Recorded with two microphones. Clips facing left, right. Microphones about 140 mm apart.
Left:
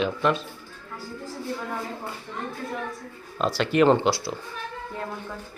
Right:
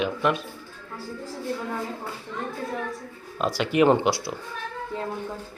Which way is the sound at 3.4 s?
10° right (ahead or behind).